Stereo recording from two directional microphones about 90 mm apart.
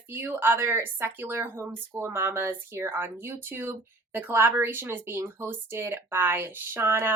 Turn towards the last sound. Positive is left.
turn(degrees=-25)  # may be behind; listen again after turning